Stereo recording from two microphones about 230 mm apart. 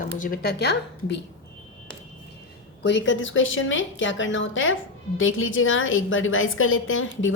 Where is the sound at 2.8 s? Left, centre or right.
Left.